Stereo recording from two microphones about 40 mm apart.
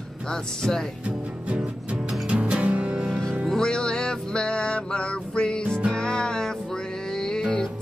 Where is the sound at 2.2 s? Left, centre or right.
Right.